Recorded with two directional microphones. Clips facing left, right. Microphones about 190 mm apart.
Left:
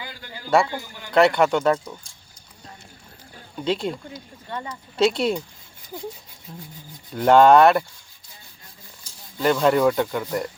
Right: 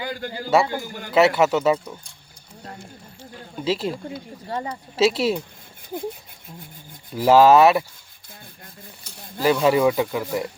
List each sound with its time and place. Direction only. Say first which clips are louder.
0.0 s a man's voice: right 9 dB; 50° right (ahead or behind)
1.1 s speech: even; 5° right (ahead or behind)
3.6 s speech: even; 5° right (ahead or behind)
4.4 s speech: right 4 dB; 30° right (ahead or behind)
4.9 s speech: right 1 dB; 5° right (ahead or behind)
7.1 s speech: even; 5° right (ahead or behind)
8.6 s dishes: right 5 dB; 60° right (ahead or behind)
9.4 s speech: right 1 dB; 5° right (ahead or behind)